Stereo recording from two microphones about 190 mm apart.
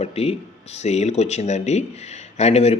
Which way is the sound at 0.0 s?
35° left (ahead or behind).